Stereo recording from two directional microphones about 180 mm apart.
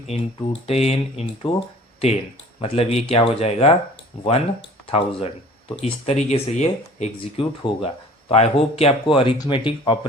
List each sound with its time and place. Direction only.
0.1 s speech: 35° left (ahead or behind)
2.6 s speech: 35° left (ahead or behind)